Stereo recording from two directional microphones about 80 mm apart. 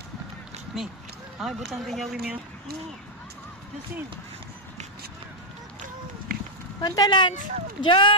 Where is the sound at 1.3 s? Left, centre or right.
Centre.